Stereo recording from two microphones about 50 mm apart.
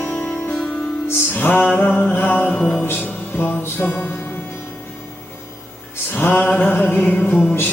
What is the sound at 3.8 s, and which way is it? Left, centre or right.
Music, left.